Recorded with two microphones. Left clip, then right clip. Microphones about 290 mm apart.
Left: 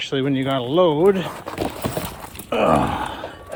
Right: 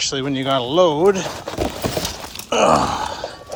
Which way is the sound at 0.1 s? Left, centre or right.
Centre.